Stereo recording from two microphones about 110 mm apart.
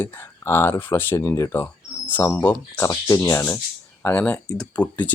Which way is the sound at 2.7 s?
30° left (ahead or behind).